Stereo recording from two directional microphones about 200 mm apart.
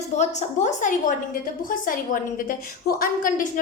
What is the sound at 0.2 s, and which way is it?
A woman's voice, 35° left (ahead or behind).